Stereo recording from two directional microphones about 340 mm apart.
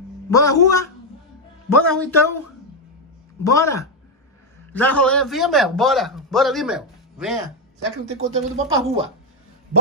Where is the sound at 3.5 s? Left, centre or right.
Centre.